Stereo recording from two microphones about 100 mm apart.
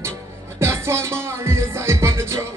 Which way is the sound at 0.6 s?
25° right (ahead or behind).